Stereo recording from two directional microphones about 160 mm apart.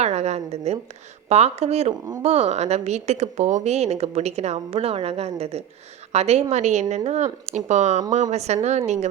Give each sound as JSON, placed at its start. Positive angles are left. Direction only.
{"t": 0.0, "sound": "a woman's voice", "side_deg": -40}